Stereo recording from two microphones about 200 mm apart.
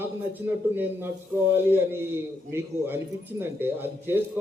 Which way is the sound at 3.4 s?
10° right (ahead or behind).